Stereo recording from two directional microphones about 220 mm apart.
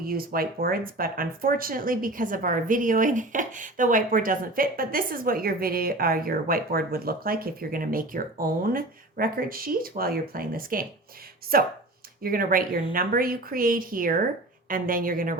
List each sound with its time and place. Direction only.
0.0 s speech: 40° right (ahead or behind)